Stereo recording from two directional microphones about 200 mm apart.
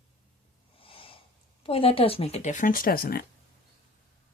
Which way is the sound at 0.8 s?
25° left (ahead or behind).